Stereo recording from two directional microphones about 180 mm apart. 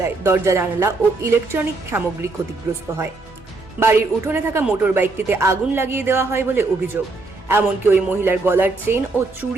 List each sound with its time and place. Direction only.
0.0 s speech: 15° right (ahead or behind)
3.8 s speech: 10° right (ahead or behind)